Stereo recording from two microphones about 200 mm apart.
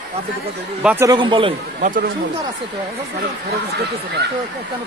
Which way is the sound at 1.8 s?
45° right (ahead or behind).